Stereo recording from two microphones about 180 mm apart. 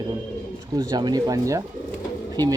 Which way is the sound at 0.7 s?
20° right (ahead or behind).